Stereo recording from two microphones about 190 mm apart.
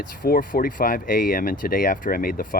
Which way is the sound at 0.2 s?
50° left (ahead or behind).